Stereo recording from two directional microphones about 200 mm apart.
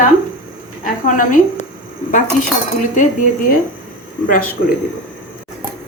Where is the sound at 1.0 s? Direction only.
45° left (ahead or behind).